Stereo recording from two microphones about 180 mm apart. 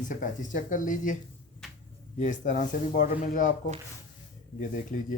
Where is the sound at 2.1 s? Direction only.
45° left (ahead or behind).